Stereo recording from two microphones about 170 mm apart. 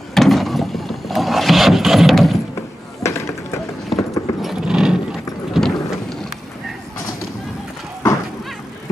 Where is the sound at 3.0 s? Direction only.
15° left (ahead or behind).